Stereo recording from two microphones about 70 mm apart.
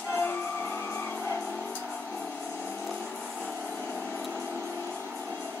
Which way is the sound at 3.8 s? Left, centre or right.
Left.